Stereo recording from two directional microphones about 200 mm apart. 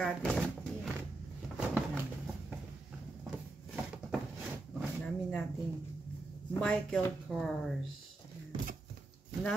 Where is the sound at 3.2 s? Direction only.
Centre (ahead or behind).